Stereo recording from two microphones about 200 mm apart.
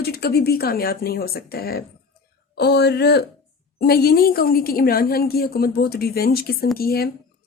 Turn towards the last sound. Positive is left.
turn(degrees=50)  # may be behind; listen again after turning